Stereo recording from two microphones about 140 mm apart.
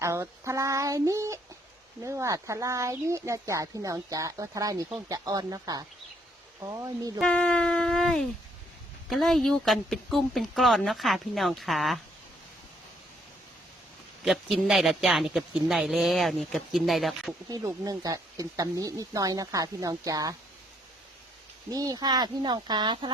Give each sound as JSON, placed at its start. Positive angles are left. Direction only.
{"t": 0.0, "sound": "speech", "side_deg": -20}
{"t": 7.2, "sound": "speech", "side_deg": 5}
{"t": 14.3, "sound": "speech", "side_deg": 0}
{"t": 17.5, "sound": "speech", "side_deg": -25}
{"t": 21.7, "sound": "speech", "side_deg": -25}